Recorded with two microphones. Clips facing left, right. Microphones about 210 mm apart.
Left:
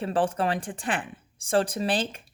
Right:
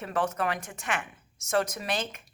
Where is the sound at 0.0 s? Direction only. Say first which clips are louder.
Left 4 dB; 30° left (ahead or behind).